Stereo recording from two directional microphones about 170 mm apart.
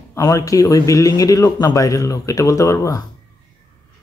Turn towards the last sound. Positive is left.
turn(degrees=20)  # may be behind; listen again after turning